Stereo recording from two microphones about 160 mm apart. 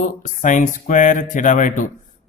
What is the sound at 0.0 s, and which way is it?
Speech, 50° left (ahead or behind).